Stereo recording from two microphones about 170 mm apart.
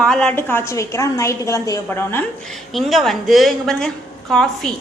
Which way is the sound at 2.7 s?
Centre (ahead or behind).